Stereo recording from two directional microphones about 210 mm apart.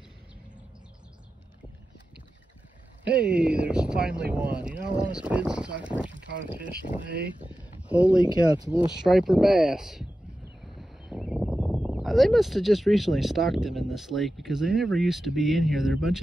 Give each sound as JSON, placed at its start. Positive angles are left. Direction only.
{"t": 3.1, "sound": "speech", "side_deg": -5}
{"t": 6.4, "sound": "speech", "side_deg": -40}
{"t": 7.4, "sound": "a sound", "side_deg": -5}
{"t": 8.6, "sound": "speech", "side_deg": -5}